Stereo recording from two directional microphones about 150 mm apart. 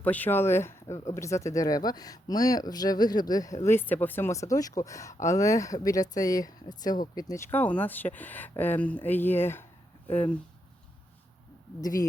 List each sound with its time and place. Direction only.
0.0 s speech: 10° left (ahead or behind)
11.8 s speech: 25° left (ahead or behind)